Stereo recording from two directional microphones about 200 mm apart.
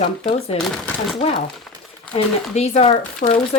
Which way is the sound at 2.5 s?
30° left (ahead or behind).